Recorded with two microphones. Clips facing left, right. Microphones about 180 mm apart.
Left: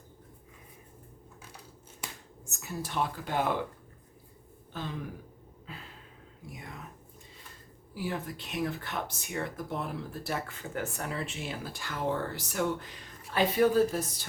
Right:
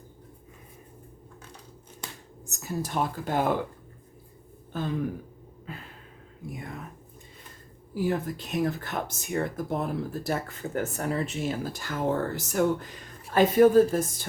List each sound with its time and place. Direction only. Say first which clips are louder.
2.5 s speech: right 6 dB; 40° right (ahead or behind)
4.7 s speech: right 7 dB; 50° right (ahead or behind)
6.5 s a sound: right 6 dB; 50° right (ahead or behind)
7.9 s speech: right 8 dB; 40° right (ahead or behind)